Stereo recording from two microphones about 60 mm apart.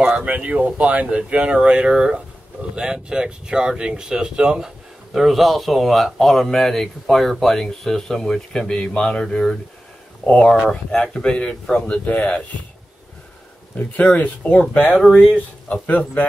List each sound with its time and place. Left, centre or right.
0.0 s speech: centre
10.7 s speech: centre
12.1 s speech: left
13.7 s speech: left